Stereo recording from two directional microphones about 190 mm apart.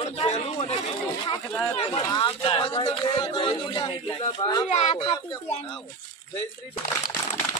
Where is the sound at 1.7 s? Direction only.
25° left (ahead or behind).